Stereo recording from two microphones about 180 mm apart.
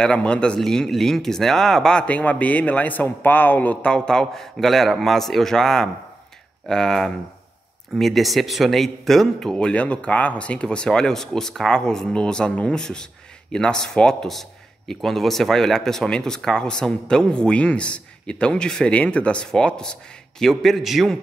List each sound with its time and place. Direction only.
0.0 s speech: 5° left (ahead or behind)